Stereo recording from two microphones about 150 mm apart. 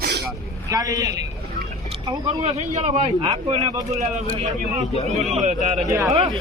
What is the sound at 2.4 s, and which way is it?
A man's voice, 45° right (ahead or behind).